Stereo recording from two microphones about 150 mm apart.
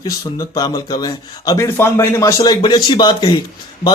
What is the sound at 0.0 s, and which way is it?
A man's voice, 25° left (ahead or behind).